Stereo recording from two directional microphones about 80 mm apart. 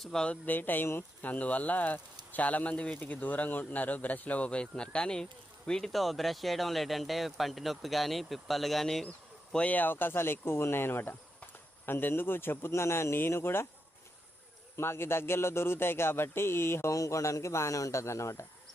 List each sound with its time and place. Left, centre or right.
0.0 s a man's voice: centre
0.4 s a man's voice: left; by 9.0 s centre
9.6 s speech: centre
14.8 s speech: left